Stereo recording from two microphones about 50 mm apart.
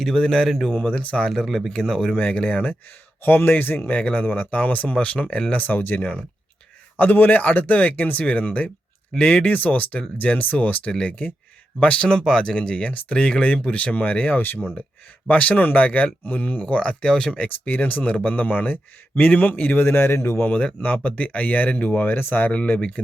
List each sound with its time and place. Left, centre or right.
0.0 s speech: centre
0.9 s speech: centre
1.5 s speech: centre
2.3 s speech: left
3.2 s a man's voice: left
12.2 s speech: centre
12.6 s a man's voice: left
17.7 s a man's voice: left
18.0 s speech: left
18.3 s a man's voice: left
20.5 s a man's voice: left
22.5 s speech: left